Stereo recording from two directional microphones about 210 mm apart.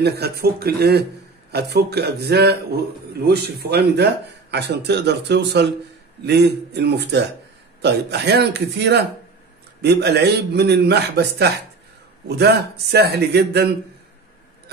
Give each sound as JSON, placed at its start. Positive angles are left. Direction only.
{"t": 0.0, "sound": "a man's voice", "side_deg": -50}